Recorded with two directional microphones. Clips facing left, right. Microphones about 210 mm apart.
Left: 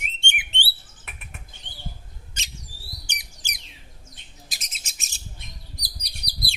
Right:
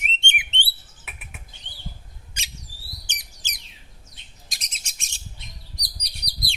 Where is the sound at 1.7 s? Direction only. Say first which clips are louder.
Left 3 dB; 50° left (ahead or behind).